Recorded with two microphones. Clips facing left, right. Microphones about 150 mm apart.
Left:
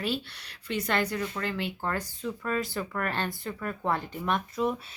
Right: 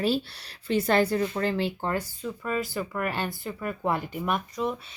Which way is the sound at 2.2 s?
5° right (ahead or behind).